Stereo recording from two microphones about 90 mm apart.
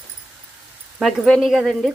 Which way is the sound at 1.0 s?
Centre (ahead or behind).